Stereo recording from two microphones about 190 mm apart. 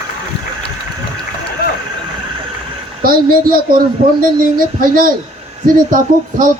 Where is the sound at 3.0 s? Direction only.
50° right (ahead or behind).